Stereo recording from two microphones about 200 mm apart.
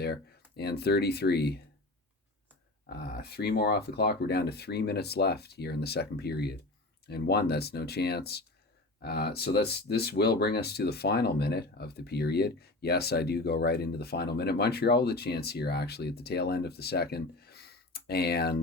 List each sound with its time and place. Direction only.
0.0 s speech: 55° left (ahead or behind)
2.9 s speech: 50° left (ahead or behind)